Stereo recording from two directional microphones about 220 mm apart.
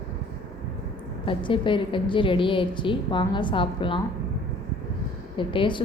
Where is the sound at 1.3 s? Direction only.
20° left (ahead or behind).